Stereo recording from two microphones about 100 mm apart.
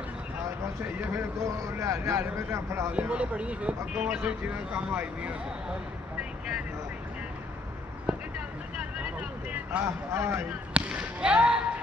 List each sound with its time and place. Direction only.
1.1 s a man's voice: 30° right (ahead or behind)
2.9 s speech: 10° right (ahead or behind)
8.7 s vehicle: 10° right (ahead or behind)
9.7 s speech: 25° right (ahead or behind)
10.7 s speech: 10° right (ahead or behind)